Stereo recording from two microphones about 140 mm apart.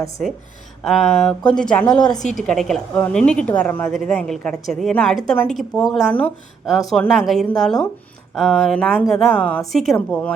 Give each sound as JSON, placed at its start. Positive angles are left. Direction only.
{"t": 0.9, "sound": "a woman's voice", "side_deg": 0}
{"t": 2.0, "sound": "a woman's voice", "side_deg": 30}
{"t": 2.5, "sound": "a woman's voice", "side_deg": 5}